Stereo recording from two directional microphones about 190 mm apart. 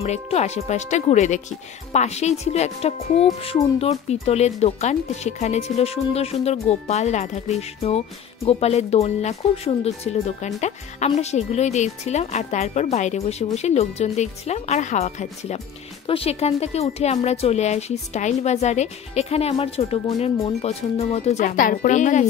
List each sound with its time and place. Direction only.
0.0 s speech: 35° left (ahead or behind)